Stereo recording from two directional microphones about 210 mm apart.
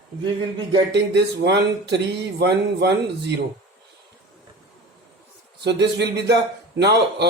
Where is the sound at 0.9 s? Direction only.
55° right (ahead or behind).